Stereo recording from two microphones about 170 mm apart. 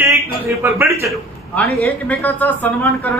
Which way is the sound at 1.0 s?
10° left (ahead or behind).